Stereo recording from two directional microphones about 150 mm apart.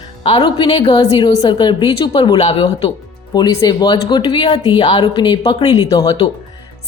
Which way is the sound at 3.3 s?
25° left (ahead or behind).